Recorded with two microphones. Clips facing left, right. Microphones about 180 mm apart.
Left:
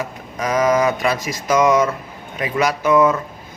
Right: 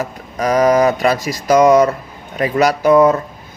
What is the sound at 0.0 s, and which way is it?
Speech, 35° right (ahead or behind).